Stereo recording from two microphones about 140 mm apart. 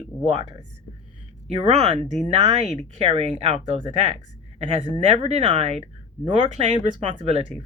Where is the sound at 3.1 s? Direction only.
45° right (ahead or behind).